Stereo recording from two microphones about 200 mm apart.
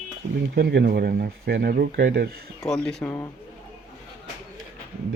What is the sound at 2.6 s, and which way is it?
Speech, centre (ahead or behind).